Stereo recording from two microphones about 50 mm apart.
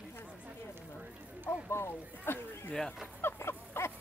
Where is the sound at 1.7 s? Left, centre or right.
Left.